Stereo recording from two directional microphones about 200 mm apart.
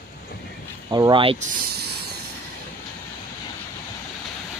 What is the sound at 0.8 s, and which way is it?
Speech, 20° right (ahead or behind).